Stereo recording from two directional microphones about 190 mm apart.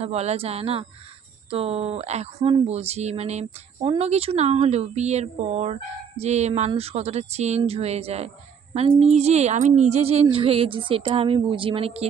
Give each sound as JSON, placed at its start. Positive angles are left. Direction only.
{"t": 0.0, "sound": "a woman's voice", "side_deg": -35}